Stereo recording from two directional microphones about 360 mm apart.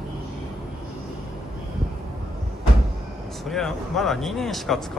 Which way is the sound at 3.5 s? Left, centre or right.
Centre.